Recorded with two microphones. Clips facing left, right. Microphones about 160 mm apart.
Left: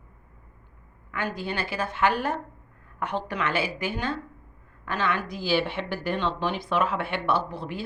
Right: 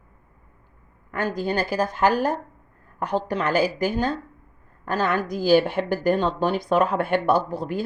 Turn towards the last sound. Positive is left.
turn(degrees=-40)  # may be behind; listen again after turning